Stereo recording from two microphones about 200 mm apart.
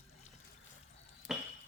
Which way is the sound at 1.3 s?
Centre (ahead or behind).